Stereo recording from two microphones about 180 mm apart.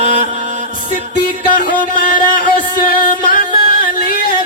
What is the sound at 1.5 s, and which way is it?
Music, 50° left (ahead or behind).